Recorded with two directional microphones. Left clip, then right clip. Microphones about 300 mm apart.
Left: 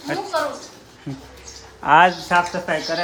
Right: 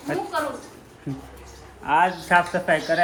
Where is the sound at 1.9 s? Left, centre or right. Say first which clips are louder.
Left 6 dB; left.